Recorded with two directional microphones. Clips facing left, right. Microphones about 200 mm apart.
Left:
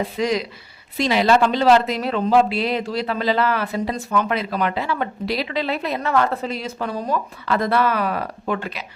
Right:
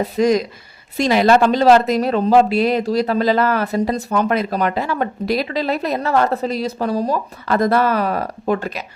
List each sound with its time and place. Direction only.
0.0 s speech: 45° right (ahead or behind)